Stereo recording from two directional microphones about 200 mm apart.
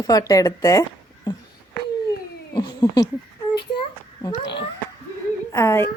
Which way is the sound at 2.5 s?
20° left (ahead or behind).